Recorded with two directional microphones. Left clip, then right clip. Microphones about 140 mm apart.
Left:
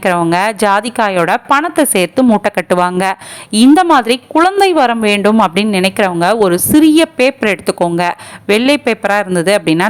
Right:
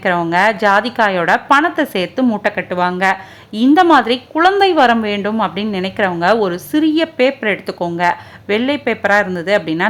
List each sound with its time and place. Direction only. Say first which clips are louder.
0.0 s a woman's voice: left 1 dB; 35° left (ahead or behind)
2.4 s a woman's voice: left 4 dB; 60° left (ahead or behind); by 9.8 s 40° left (ahead or behind)